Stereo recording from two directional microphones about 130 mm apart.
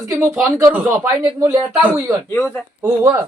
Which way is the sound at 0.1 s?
20° right (ahead or behind).